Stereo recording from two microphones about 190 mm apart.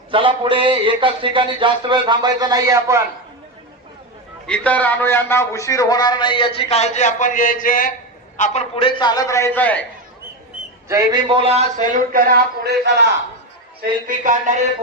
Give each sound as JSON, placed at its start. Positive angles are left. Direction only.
{"t": 0.1, "sound": "speech", "side_deg": -25}
{"t": 4.4, "sound": "speech", "side_deg": 5}
{"t": 8.4, "sound": "speech", "side_deg": 35}
{"t": 10.8, "sound": "a man's voice", "side_deg": -20}
{"t": 13.8, "sound": "a man's voice", "side_deg": -45}